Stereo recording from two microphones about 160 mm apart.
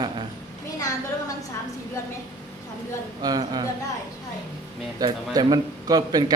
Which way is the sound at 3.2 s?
25° right (ahead or behind).